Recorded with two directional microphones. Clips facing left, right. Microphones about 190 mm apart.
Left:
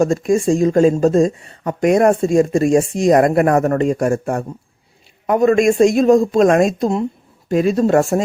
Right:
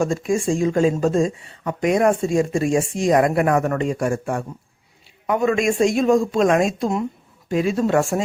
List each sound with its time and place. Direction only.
0.0 s speech: 40° left (ahead or behind)